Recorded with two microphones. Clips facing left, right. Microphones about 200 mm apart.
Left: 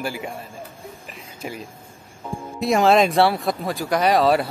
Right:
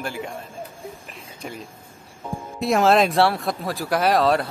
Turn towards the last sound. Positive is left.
turn(degrees=0)  # may be behind; listen again after turning